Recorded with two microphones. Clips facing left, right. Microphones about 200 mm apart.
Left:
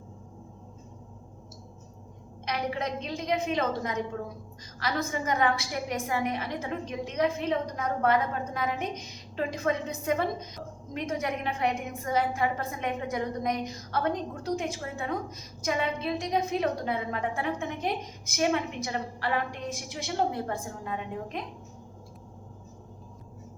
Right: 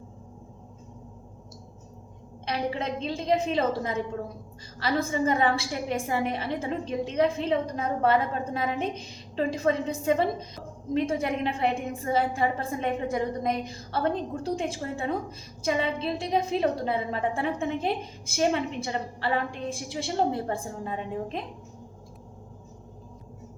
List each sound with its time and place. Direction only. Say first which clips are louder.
2.5 s a woman's voice: right 2 dB; 30° right (ahead or behind)
4.8 s a woman's voice: right 5 dB; 30° right (ahead or behind)